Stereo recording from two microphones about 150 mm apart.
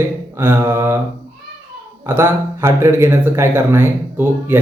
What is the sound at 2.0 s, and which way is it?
Speech, 15° right (ahead or behind).